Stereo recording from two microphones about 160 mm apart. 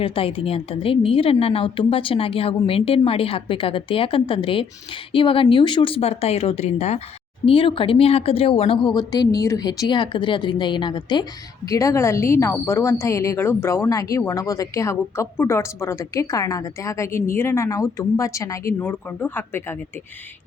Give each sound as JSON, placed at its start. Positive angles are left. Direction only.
{"t": 0.0, "sound": "a woman's voice", "side_deg": 35}
{"t": 18.8, "sound": "a woman's voice", "side_deg": 10}